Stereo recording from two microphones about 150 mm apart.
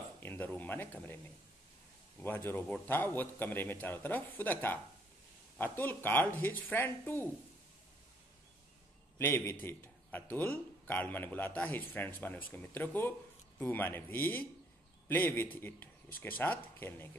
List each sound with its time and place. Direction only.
0.2 s speech: 10° left (ahead or behind)
2.2 s a man's voice: 15° left (ahead or behind)
9.2 s a man's voice: 15° left (ahead or behind)